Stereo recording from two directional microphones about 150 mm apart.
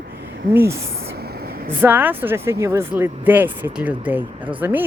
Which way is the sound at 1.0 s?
90° right.